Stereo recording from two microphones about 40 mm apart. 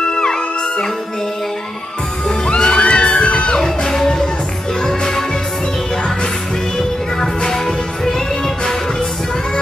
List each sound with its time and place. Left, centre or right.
0.1 s music: left
2.4 s music: left
3.9 s music: centre
7.2 s music: centre